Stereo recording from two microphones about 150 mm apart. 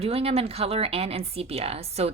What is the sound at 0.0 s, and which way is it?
Speech, 40° right (ahead or behind).